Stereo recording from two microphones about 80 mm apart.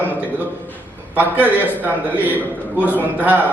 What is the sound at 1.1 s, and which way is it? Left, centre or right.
A man's voice, right.